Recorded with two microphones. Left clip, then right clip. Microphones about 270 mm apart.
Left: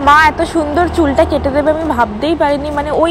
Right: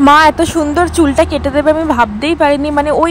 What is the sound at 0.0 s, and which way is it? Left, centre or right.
Speech, right.